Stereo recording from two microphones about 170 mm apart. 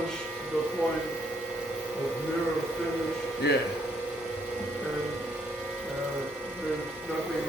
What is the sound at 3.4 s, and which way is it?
Speech, 80° left.